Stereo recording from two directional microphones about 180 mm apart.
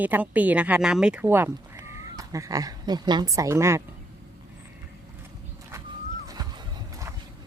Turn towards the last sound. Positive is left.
turn(degrees=-20)  # may be behind; listen again after turning